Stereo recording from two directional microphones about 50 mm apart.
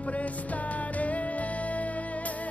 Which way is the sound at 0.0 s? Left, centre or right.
Left.